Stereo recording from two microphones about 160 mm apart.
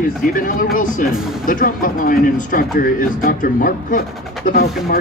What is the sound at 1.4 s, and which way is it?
Speech, 60° left (ahead or behind).